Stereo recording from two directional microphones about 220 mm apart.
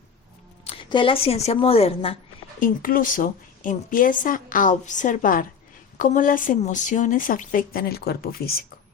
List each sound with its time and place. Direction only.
0.6 s speech: 25° left (ahead or behind)
2.6 s a woman's voice: 40° left (ahead or behind)